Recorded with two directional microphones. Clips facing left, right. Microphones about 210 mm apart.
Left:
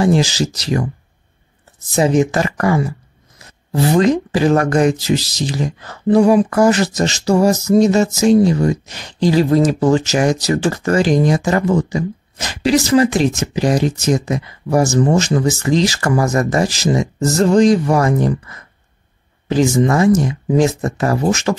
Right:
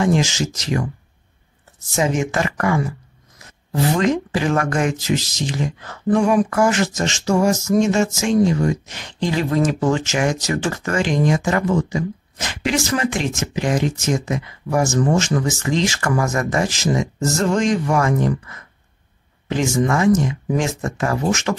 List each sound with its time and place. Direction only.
0.0 s speech: 35° left (ahead or behind)
2.0 s speech: 35° left (ahead or behind)
3.9 s speech: 35° left (ahead or behind)